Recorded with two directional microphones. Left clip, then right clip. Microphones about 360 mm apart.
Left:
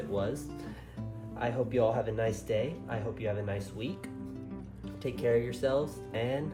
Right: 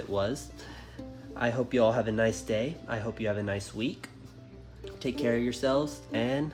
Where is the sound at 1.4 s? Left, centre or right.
Right.